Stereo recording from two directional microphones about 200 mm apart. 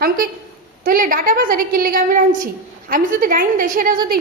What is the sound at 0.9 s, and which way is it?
A woman's voice, 45° right (ahead or behind).